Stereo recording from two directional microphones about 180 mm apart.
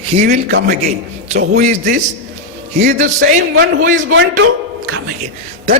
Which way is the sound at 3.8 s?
65° right (ahead or behind).